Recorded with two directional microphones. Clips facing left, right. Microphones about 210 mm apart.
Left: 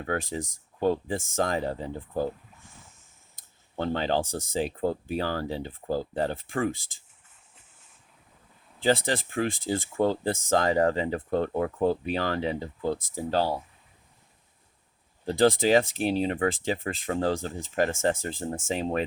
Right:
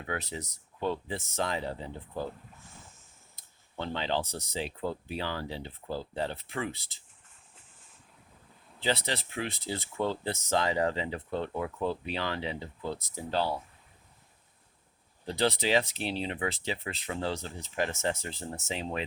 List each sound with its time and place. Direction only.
0.0 s speech: 45° left (ahead or behind)
3.3 s speech: 45° left (ahead or behind)
8.8 s speech: 50° left (ahead or behind)
15.3 s speech: 50° left (ahead or behind)